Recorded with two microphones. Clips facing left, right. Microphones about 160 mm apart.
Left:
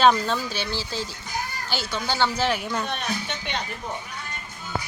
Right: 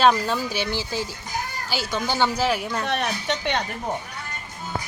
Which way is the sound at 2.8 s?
75° right (ahead or behind).